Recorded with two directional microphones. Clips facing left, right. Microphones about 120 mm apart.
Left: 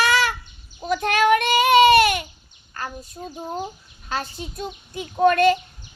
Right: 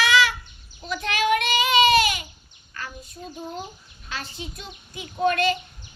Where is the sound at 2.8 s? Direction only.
45° left (ahead or behind).